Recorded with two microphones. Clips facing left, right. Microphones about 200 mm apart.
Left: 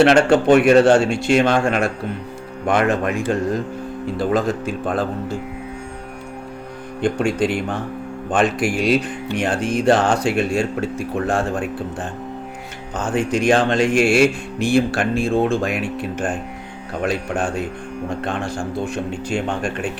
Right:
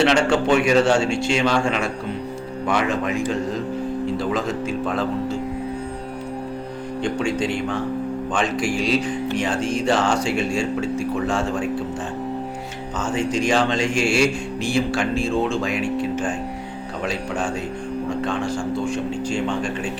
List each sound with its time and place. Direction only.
0.0 s speech: 55° left (ahead or behind)
4.2 s speech: 55° left (ahead or behind)
7.0 s speech: 55° left (ahead or behind)
12.9 s speech: 60° left (ahead or behind)